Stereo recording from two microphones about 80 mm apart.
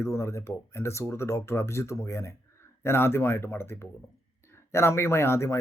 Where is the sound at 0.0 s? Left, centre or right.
Left.